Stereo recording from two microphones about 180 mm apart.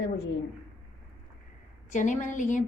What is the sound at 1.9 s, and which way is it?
Speech, 45° left (ahead or behind).